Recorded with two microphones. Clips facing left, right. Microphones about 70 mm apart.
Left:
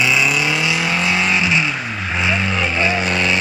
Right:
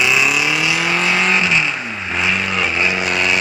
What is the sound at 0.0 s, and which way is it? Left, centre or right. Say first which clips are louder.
Vehicle: right 1 dB; centre.